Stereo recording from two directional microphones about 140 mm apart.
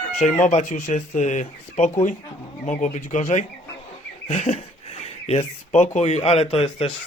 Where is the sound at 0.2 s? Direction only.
60° left (ahead or behind).